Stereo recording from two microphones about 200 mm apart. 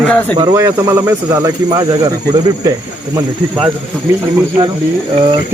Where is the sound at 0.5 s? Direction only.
15° right (ahead or behind).